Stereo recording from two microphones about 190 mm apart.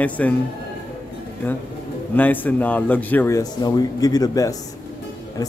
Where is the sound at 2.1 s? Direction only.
10° left (ahead or behind).